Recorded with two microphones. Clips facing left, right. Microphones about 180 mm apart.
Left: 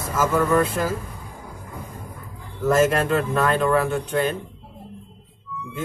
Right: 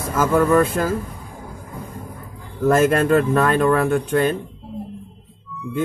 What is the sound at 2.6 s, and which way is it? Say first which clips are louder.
Speech: right 3 dB; 55° right (ahead or behind).